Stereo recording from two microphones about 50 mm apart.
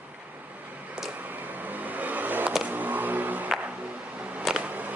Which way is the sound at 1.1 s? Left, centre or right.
Right.